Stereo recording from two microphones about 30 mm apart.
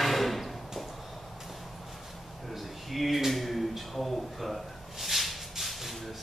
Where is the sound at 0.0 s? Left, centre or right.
Centre.